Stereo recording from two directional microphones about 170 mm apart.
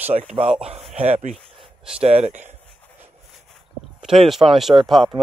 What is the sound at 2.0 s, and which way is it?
Speech, 40° right (ahead or behind).